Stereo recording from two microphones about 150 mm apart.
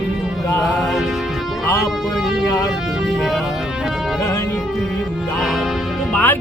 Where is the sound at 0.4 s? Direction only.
20° left (ahead or behind).